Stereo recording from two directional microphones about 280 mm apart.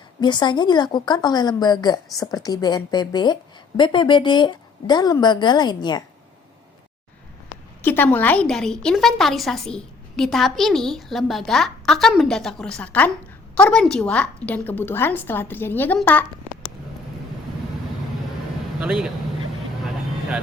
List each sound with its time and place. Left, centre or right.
0.2 s a woman's voice: centre
7.8 s a woman's voice: centre
18.8 s a woman's voice: centre